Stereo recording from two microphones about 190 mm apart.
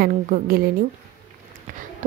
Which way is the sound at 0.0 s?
50° right (ahead or behind).